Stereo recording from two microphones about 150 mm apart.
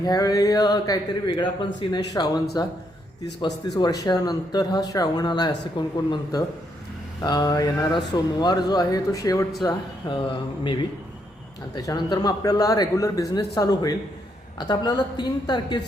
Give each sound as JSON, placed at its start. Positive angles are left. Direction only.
{"t": 0.0, "sound": "speech", "side_deg": 25}
{"t": 3.4, "sound": "speech", "side_deg": 25}